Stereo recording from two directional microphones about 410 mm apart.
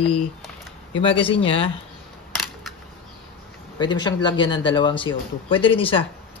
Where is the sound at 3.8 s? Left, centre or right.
Centre.